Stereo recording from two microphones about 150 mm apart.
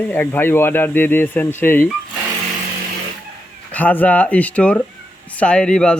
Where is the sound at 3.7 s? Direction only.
10° left (ahead or behind).